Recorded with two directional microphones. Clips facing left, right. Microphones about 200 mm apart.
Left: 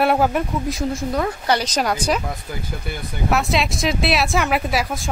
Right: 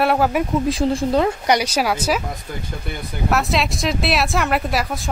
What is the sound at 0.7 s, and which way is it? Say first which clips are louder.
Speech: right 5 dB; 30° right (ahead or behind).